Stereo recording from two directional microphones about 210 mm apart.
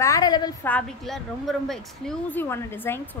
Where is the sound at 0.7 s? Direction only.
5° left (ahead or behind).